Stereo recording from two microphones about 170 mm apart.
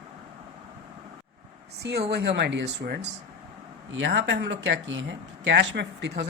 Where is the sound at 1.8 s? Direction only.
75° right (ahead or behind).